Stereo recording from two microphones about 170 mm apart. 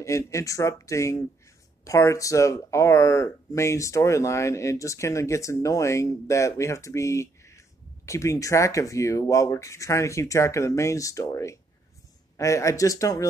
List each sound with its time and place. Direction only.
0.0 s speech: 20° left (ahead or behind)